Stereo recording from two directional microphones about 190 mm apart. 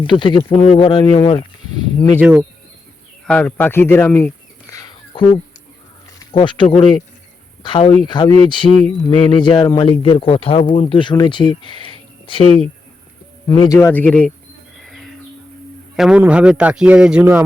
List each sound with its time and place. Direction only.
0.0 s speech: 25° left (ahead or behind)
2.0 s speech: 15° left (ahead or behind)
2.2 s speech: 5° right (ahead or behind)
3.2 s a sound: 5° left (ahead or behind)
6.1 s speech: 25° left (ahead or behind)
13.5 s speech: 20° left (ahead or behind)
13.7 s speech: 10° left (ahead or behind)
14.8 s a sound: centre (ahead or behind)
16.0 s a man's voice: 5° right (ahead or behind)